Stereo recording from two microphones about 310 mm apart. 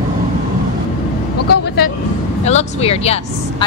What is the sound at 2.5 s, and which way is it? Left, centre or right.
Vehicle, left.